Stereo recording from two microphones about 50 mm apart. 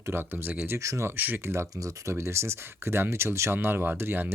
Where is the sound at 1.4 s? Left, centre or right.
Right.